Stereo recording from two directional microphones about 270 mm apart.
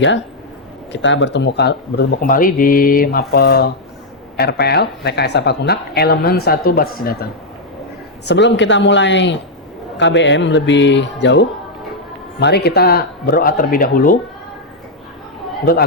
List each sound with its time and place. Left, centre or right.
0.9 s speech: left
8.3 s speech: left
15.7 s speech: left